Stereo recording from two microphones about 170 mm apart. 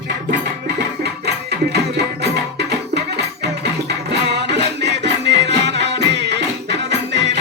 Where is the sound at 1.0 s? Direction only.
75° right (ahead or behind).